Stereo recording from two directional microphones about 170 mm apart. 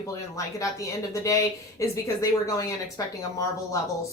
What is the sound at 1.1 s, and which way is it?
Speech, 20° left (ahead or behind).